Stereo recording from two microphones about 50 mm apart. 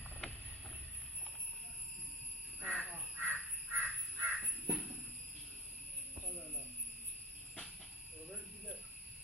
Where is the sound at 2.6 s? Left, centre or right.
Right.